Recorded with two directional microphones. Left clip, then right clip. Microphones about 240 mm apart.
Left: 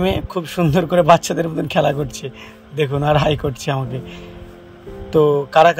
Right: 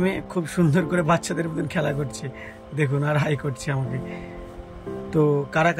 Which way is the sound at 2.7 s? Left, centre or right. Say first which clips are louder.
Left 8 dB; left.